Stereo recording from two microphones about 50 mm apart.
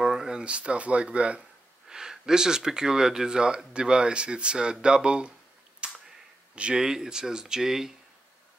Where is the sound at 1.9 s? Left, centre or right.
Centre.